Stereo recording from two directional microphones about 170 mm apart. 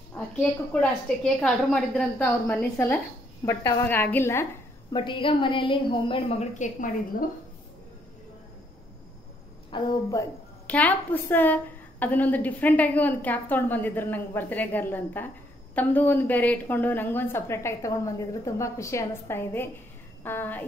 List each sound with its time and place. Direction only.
0.1 s a woman's voice: 5° left (ahead or behind)
4.9 s a woman's voice: 30° left (ahead or behind)
6.6 s a woman's voice: 50° left (ahead or behind)
9.7 s a woman's voice: 25° left (ahead or behind)
10.7 s a woman's voice: 10° left (ahead or behind)